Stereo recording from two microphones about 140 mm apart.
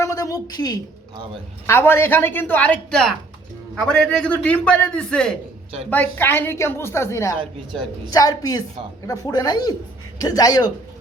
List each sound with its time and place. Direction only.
0.0 s a woman's voice: 25° left (ahead or behind)
1.6 s a man's voice: 15° left (ahead or behind)
7.3 s speech: 35° right (ahead or behind)
8.1 s speech: 25° left (ahead or behind)